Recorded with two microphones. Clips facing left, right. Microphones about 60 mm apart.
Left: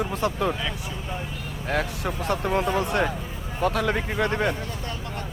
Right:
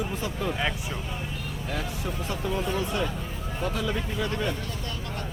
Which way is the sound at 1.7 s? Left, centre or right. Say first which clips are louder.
Left 7 dB; left.